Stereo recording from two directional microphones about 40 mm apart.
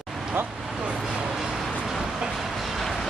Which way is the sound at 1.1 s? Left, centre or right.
Centre.